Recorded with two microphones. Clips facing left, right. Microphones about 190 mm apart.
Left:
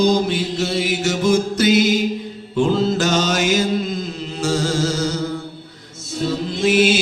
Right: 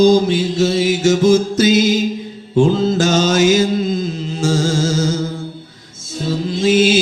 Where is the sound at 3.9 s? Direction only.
60° left (ahead or behind).